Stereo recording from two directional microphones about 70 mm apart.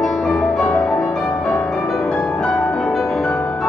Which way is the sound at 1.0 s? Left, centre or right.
Centre.